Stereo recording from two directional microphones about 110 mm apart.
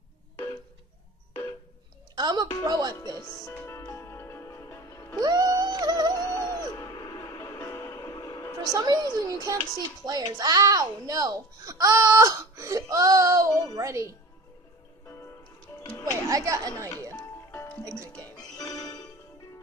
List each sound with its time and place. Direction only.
2.1 s a sound: 40° right (ahead or behind)
2.6 s speech: 35° right (ahead or behind)
3.3 s music: 30° left (ahead or behind)
5.2 s music: 35° right (ahead or behind)
6.2 s music: 30° left (ahead or behind)
6.9 s music: 40° left (ahead or behind)
7.2 s music: 25° left (ahead or behind)
8.7 s speech: 35° right (ahead or behind)
16.1 s speech: 30° right (ahead or behind)
18.1 s music: 10° left (ahead or behind)
18.6 s music: 40° left (ahead or behind)